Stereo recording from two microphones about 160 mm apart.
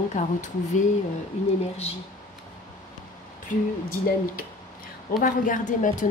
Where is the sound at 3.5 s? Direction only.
60° left (ahead or behind).